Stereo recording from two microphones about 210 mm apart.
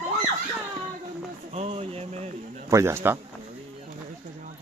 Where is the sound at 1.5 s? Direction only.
30° right (ahead or behind).